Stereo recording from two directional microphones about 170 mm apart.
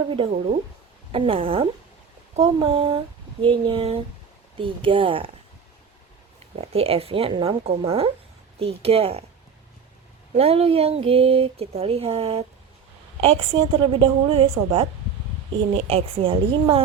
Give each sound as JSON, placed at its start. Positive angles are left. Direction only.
{"t": 0.1, "sound": "speech", "side_deg": -30}
{"t": 6.6, "sound": "speech", "side_deg": -35}
{"t": 10.3, "sound": "speech", "side_deg": -35}